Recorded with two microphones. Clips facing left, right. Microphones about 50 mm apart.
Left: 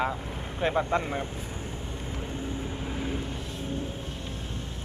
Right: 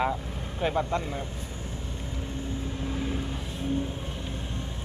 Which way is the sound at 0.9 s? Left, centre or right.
Left.